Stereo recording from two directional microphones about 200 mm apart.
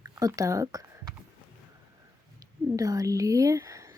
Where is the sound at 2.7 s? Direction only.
15° right (ahead or behind).